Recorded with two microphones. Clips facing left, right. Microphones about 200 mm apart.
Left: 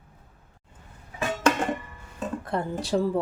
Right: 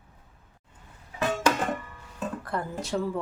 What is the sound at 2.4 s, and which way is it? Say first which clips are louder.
Speech: left 3 dB; 30° left (ahead or behind).